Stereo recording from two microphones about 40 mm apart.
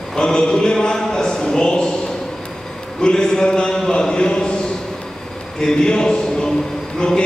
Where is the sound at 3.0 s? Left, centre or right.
Centre.